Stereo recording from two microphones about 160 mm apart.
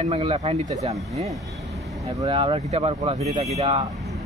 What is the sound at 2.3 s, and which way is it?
Speech, 35° right (ahead or behind).